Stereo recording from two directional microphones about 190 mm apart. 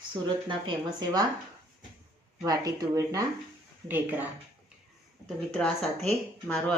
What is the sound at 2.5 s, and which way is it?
Speech, 20° right (ahead or behind).